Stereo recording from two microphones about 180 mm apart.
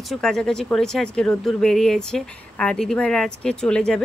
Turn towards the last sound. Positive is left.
turn(degrees=5)  # may be behind; listen again after turning